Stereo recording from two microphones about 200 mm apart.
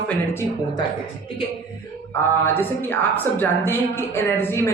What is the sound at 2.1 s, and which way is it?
A woman's voice, 10° left (ahead or behind).